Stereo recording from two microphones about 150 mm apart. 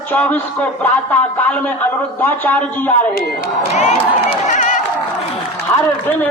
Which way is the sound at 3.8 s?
50° left (ahead or behind).